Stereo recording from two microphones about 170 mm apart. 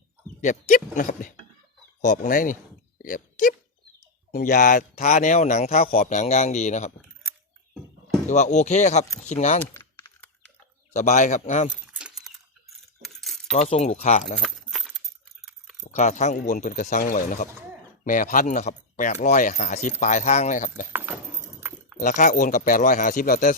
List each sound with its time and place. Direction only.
0.4 s speech: 45° left (ahead or behind)
8.3 s speech: 45° left (ahead or behind)
9.7 s typing: 15° left (ahead or behind)
10.9 s speech: 45° left (ahead or behind)
11.9 s keys jangling: 5° right (ahead or behind)
13.5 s speech: 40° left (ahead or behind)
14.4 s keys jangling: centre (ahead or behind)
15.8 s speech: 45° left (ahead or behind)
20.9 s a sound: 15° right (ahead or behind)
21.9 s speech: 50° left (ahead or behind)